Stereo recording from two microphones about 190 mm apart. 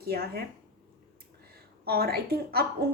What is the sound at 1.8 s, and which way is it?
Speech, 55° right (ahead or behind).